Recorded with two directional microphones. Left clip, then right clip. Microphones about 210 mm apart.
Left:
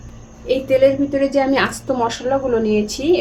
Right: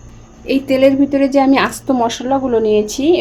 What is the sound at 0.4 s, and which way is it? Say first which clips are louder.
A woman's voice: right 1 dB; 35° right (ahead or behind).